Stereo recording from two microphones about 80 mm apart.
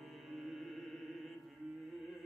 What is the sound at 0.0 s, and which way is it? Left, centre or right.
Music, centre.